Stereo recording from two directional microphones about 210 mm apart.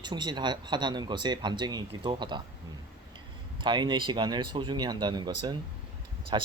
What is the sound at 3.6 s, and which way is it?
Speech, 20° right (ahead or behind).